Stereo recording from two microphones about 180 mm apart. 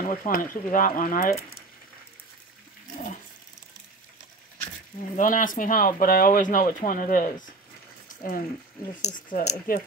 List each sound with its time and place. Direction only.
0.0 s speech: 45° left (ahead or behind)
5.1 s speech: 45° left (ahead or behind)